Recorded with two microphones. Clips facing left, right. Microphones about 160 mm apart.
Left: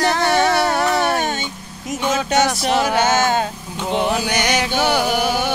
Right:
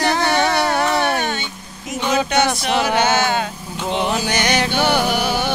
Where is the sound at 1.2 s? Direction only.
40° left (ahead or behind).